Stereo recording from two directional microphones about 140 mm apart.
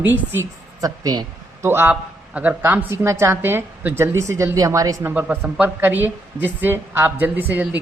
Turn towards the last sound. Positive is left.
turn(degrees=-15)  # may be behind; listen again after turning